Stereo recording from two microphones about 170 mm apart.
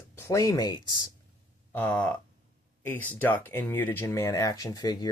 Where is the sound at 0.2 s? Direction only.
20° left (ahead or behind).